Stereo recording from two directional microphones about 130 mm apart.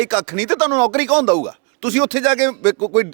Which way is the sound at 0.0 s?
15° right (ahead or behind).